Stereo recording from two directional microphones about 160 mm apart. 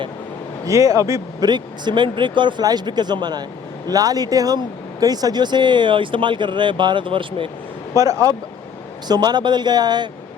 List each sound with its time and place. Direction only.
0.6 s speech: 20° right (ahead or behind)
7.9 s speech: 20° right (ahead or behind)